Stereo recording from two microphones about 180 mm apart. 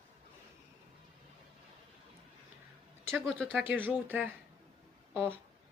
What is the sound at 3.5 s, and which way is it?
Speech, 10° right (ahead or behind).